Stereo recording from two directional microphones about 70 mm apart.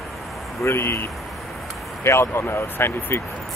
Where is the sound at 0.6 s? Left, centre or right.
Left.